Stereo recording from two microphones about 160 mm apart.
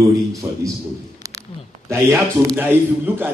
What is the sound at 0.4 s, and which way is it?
Speech, 15° right (ahead or behind).